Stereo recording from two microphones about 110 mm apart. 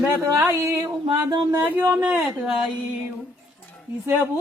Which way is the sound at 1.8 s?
15° right (ahead or behind).